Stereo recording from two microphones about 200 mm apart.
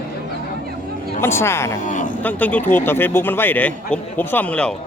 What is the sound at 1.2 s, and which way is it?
Speech, 15° left (ahead or behind).